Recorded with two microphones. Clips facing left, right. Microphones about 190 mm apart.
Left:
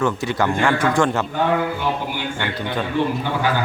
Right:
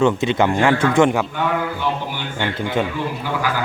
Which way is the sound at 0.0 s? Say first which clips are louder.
Right 4 dB; 20° right (ahead or behind).